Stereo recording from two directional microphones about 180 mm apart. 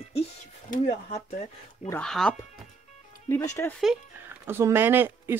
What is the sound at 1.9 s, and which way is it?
Speech, 5° left (ahead or behind).